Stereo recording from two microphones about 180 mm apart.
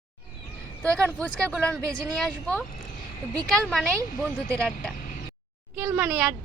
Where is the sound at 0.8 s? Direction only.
10° left (ahead or behind).